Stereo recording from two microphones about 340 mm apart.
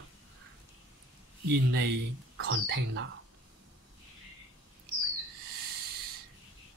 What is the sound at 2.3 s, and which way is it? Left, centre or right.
Speech, right.